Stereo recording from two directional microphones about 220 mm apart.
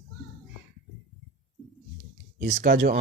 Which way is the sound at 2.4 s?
40° right (ahead or behind).